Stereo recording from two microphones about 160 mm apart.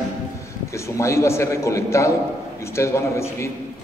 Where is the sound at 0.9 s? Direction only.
20° left (ahead or behind).